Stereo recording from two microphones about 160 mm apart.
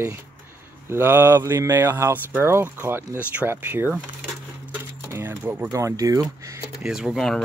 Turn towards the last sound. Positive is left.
turn(degrees=0)  # may be behind; listen again after turning